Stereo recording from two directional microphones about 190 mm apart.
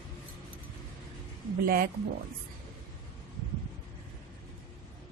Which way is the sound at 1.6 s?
50° right (ahead or behind).